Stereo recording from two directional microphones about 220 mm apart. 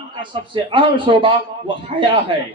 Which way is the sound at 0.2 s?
20° right (ahead or behind).